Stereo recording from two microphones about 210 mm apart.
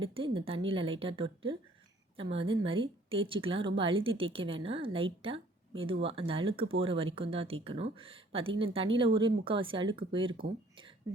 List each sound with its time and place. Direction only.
0.0 s speech: 25° right (ahead or behind)